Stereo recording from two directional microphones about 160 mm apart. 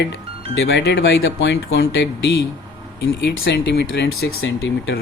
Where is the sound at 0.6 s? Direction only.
90° left.